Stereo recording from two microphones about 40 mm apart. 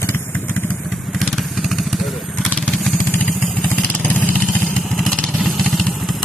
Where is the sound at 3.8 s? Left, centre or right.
Left.